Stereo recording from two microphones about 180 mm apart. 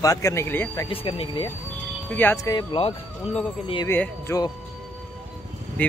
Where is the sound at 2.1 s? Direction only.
15° left (ahead or behind).